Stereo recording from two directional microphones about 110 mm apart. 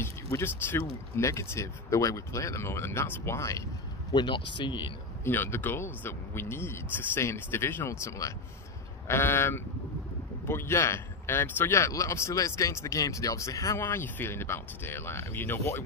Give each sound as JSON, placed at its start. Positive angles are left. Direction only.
{"t": 0.0, "sound": "speech", "side_deg": 20}
{"t": 4.1, "sound": "speech", "side_deg": 45}
{"t": 5.2, "sound": "speech", "side_deg": 20}